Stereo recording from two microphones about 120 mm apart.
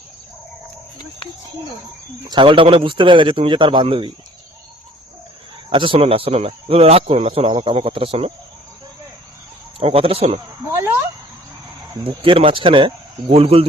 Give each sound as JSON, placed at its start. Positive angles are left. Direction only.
{"t": 2.4, "sound": "a man's voice", "side_deg": -50}
{"t": 5.7, "sound": "a man's voice", "side_deg": -45}
{"t": 9.8, "sound": "speech", "side_deg": -55}
{"t": 10.7, "sound": "speech", "side_deg": -20}
{"t": 12.0, "sound": "a man's voice", "side_deg": -50}